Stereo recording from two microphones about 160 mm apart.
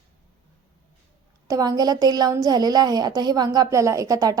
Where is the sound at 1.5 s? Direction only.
20° right (ahead or behind).